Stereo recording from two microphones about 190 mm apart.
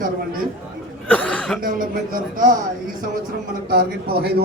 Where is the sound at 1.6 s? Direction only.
45° right (ahead or behind).